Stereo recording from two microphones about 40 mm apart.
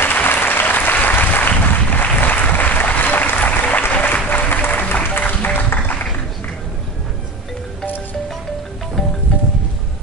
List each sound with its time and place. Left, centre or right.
0.0 s applause: left
3.9 s music: left